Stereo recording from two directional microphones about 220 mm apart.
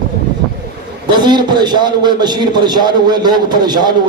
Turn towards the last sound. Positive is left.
turn(degrees=-20)  # may be behind; listen again after turning